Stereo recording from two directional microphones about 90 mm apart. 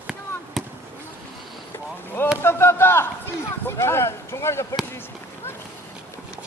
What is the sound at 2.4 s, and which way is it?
Speech, 25° left (ahead or behind).